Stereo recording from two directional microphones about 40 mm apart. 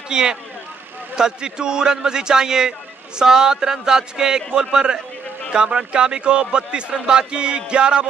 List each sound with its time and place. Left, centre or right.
0.1 s a man's voice: centre